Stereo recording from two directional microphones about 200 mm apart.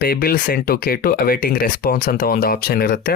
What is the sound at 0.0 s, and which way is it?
Speech, 50° left (ahead or behind).